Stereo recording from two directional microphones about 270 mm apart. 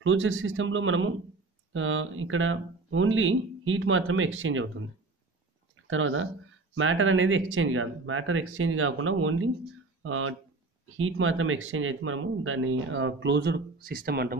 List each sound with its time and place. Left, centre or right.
0.0 s speech: right
5.9 s speech: right